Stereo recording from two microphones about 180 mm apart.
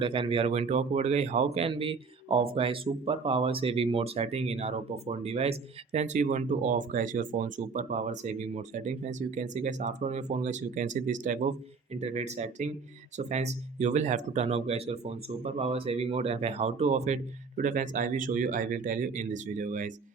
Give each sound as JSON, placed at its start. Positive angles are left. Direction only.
{"t": 0.0, "sound": "speech", "side_deg": -30}